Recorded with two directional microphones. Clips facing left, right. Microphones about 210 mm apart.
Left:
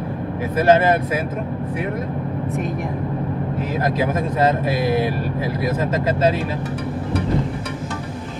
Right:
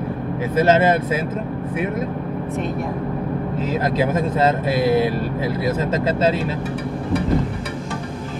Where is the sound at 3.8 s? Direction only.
25° right (ahead or behind).